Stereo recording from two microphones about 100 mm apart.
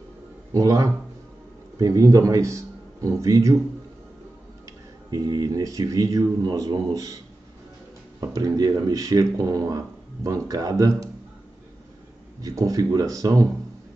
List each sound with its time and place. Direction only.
0.5 s speech: 35° right (ahead or behind)
5.1 s speech: 40° right (ahead or behind)
8.2 s speech: 40° right (ahead or behind)
12.4 s speech: 35° right (ahead or behind)